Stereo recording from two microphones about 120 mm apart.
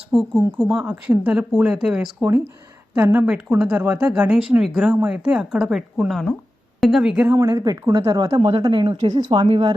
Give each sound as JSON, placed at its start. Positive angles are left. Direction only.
{"t": 0.7, "sound": "speech", "side_deg": -10}
{"t": 7.3, "sound": "speech", "side_deg": -30}
{"t": 8.4, "sound": "speech", "side_deg": -45}